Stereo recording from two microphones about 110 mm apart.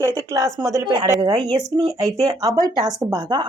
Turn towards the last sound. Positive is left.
turn(degrees=-45)  # may be behind; listen again after turning